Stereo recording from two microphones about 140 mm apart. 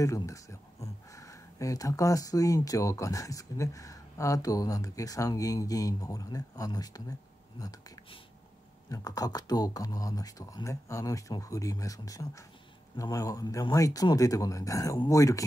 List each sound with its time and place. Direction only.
0.0 s speech: 20° left (ahead or behind)
8.8 s speech: 25° left (ahead or behind)